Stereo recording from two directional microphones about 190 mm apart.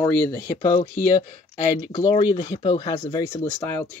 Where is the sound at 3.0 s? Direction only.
10° left (ahead or behind).